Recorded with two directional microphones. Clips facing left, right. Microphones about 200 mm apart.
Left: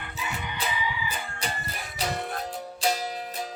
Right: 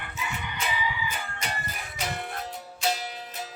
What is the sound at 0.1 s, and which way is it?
Music, 35° left (ahead or behind).